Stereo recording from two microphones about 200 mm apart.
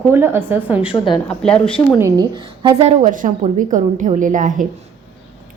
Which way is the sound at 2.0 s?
15° right (ahead or behind).